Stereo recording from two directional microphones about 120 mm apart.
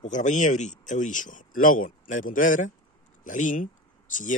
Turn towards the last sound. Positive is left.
turn(degrees=90)